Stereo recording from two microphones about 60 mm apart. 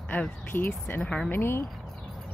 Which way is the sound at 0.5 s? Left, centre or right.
Left.